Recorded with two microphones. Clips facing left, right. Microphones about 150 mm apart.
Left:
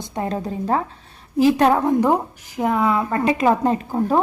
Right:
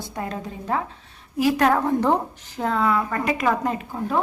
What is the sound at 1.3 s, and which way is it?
A woman's voice, 25° left (ahead or behind).